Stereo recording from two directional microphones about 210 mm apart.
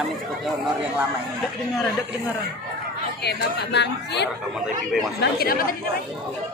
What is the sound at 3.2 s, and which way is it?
Speech, 55° left (ahead or behind).